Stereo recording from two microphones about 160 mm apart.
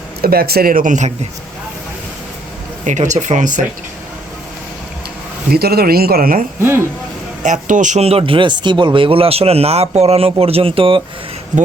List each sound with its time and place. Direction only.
0.2 s speech: 70° right (ahead or behind); by 1.1 s 50° right (ahead or behind)
2.8 s speech: 50° right (ahead or behind)
5.5 s speech: 75° right (ahead or behind)
6.6 s speech: 15° right (ahead or behind)
7.4 s speech: 50° right (ahead or behind); by 11.0 s 35° right (ahead or behind)